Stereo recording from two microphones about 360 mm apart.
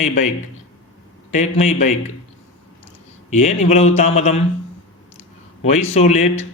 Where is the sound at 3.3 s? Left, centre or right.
Centre.